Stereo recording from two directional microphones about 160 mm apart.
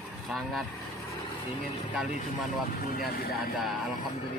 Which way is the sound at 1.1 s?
25° left (ahead or behind).